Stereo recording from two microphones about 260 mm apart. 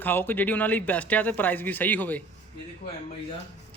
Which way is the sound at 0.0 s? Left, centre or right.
Centre.